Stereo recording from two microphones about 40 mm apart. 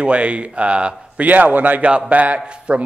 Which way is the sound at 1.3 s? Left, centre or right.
Right.